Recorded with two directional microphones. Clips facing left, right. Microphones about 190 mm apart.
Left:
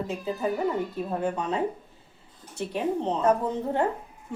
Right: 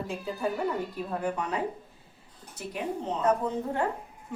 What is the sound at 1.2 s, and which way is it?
Speech, 25° left (ahead or behind).